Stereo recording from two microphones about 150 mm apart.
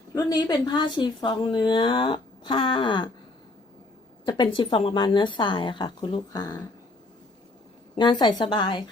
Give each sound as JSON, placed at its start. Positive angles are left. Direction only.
{"t": 0.1, "sound": "a woman's voice", "side_deg": 25}
{"t": 4.3, "sound": "a woman's voice", "side_deg": 30}
{"t": 7.9, "sound": "a woman's voice", "side_deg": 30}